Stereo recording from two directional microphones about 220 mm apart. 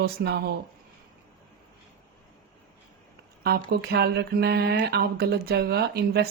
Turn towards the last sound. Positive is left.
turn(degrees=-45)  # may be behind; listen again after turning